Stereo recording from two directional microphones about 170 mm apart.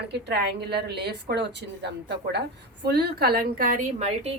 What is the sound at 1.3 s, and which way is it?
Speech, 85° right.